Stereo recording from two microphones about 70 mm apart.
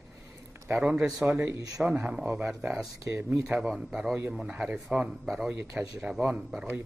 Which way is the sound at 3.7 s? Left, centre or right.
Centre.